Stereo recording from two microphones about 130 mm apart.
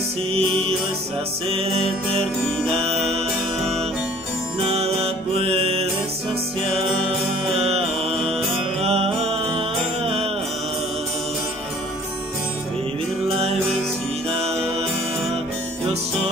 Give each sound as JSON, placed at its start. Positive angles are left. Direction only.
{"t": 0.3, "sound": "music", "side_deg": -50}
{"t": 4.6, "sound": "music", "side_deg": -50}
{"t": 14.3, "sound": "music", "side_deg": -50}